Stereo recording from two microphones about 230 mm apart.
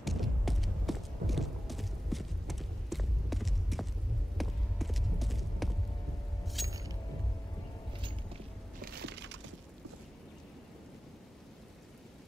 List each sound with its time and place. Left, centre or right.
0.0 s a sound: centre
6.4 s keys jangling: centre
6.7 s music: centre
8.8 s wood: right